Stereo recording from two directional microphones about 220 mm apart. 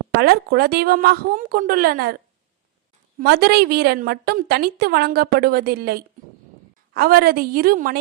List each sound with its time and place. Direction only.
0.2 s a woman's voice: 45° right (ahead or behind)
3.2 s a woman's voice: 45° right (ahead or behind)